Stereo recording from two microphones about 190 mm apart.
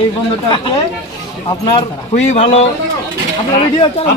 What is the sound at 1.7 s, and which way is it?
Speech, 35° left (ahead or behind).